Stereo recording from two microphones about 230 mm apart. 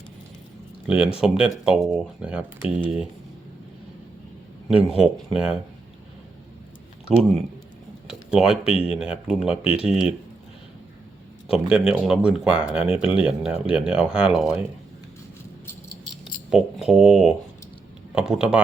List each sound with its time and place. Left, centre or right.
0.9 s speech: centre
5.3 s speech: centre
8.0 s a sound: centre
8.6 s speech: left
9.0 s speech: centre
9.6 s speech: left
9.9 s speech: centre
11.5 s speech: centre
16.5 s speech: centre